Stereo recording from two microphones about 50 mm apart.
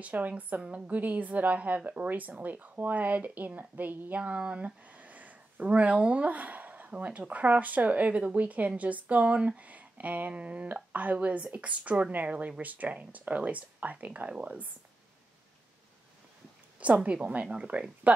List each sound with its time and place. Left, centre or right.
0.0 s speech: right
4.2 s speech: right
16.8 s speech: right